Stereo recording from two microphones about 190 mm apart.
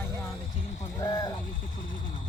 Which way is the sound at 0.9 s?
20° left (ahead or behind).